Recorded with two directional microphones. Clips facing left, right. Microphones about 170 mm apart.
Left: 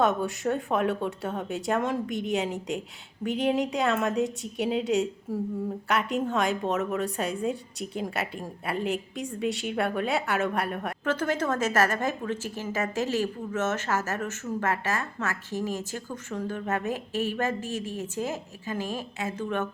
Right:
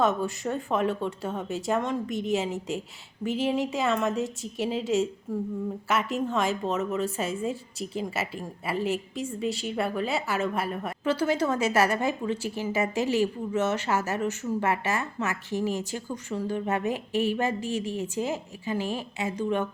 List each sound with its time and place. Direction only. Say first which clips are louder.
0.0 s a woman's voice: left 1 dB; centre (ahead or behind)
17.6 s a woman's voice: right 3 dB; 45° left (ahead or behind)
18.0 s a woman's voice: right 2 dB; 15° right (ahead or behind)